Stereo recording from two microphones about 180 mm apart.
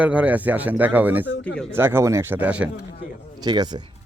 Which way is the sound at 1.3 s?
80° left.